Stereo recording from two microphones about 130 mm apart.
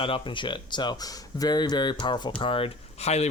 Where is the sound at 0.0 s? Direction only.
40° left (ahead or behind).